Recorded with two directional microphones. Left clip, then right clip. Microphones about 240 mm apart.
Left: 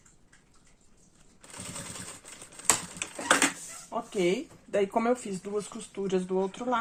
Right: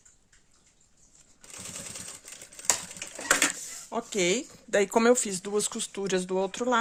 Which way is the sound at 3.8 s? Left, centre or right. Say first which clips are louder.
Right 1 dB; right.